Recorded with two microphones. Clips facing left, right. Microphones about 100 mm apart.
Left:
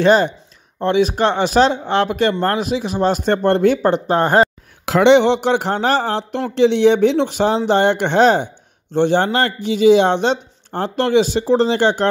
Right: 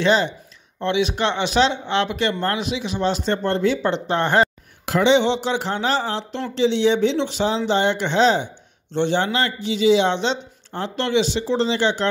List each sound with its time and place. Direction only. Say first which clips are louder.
0.0 s speech: left 5 dB; 45° left (ahead or behind)
4.8 s speech: left 5 dB; 70° left (ahead or behind); by 12.1 s 50° left (ahead or behind)